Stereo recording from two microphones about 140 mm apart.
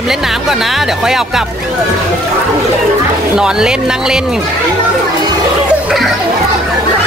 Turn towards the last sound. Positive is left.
turn(degrees=0)  # may be behind; listen again after turning